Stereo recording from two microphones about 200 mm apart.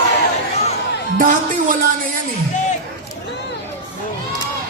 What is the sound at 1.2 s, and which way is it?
Music, 45° right (ahead or behind).